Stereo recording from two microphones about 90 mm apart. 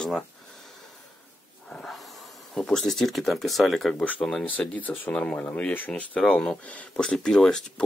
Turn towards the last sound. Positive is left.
turn(degrees=5)  # may be behind; listen again after turning